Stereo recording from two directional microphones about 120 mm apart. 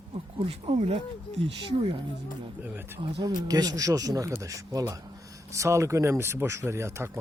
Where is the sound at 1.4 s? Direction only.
50° right (ahead or behind).